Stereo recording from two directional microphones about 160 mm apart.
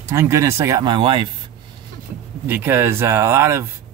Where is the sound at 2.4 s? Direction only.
15° right (ahead or behind).